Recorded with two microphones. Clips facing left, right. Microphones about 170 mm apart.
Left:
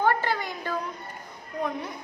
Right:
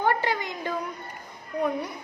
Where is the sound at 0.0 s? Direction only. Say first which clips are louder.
Even; 15° right (ahead or behind).